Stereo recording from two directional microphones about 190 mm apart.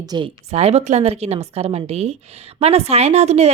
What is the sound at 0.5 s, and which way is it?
A woman's voice, 35° right (ahead or behind).